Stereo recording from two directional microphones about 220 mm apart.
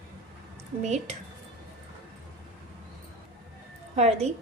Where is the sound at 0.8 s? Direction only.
30° right (ahead or behind).